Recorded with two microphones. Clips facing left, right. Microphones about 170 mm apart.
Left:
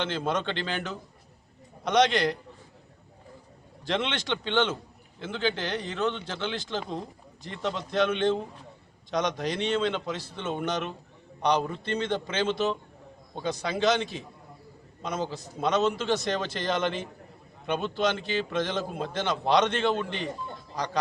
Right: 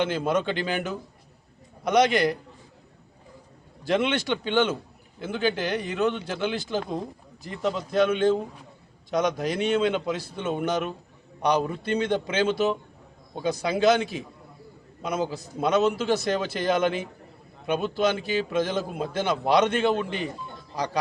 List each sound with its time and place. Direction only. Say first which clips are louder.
0.0 s a man's voice: right 4 dB; 10° right (ahead or behind)
3.8 s a man's voice: right 5 dB; 10° right (ahead or behind)